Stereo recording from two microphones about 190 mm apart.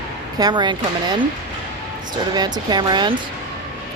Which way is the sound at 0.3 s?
20° right (ahead or behind).